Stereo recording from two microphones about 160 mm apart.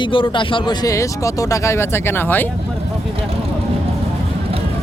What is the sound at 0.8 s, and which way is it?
Speech, 20° left (ahead or behind).